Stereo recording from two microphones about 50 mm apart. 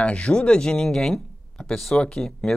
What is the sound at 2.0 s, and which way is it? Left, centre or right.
Speech, centre.